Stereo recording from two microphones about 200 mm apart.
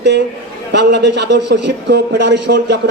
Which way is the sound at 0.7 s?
60° right (ahead or behind).